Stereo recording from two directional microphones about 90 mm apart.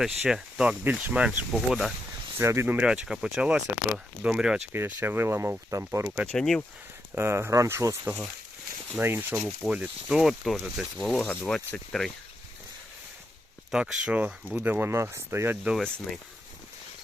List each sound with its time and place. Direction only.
0.0 s speech: 5° right (ahead or behind)
1.5 s speech: centre (ahead or behind)
2.4 s speech: 30° right (ahead or behind)
2.8 s speech: 10° right (ahead or behind)
4.7 s speech: 25° right (ahead or behind)
6.3 s speech: 5° left (ahead or behind)
7.2 s speech: 25° right (ahead or behind)
9.0 s speech: 25° right (ahead or behind)
9.3 s speech: 10° right (ahead or behind)
11.0 s speech: centre (ahead or behind)
13.7 s speech: 10° right (ahead or behind); by 15.5 s 30° right (ahead or behind)